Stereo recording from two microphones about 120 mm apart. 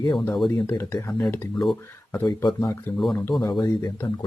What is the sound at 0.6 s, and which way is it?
Speech, 25° left (ahead or behind).